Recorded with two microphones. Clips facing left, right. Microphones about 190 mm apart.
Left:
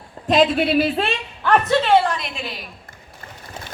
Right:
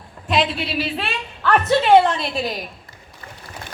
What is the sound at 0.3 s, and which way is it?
Speech, 45° left (ahead or behind).